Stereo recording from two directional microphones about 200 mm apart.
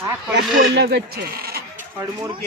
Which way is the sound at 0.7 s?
60° right (ahead or behind).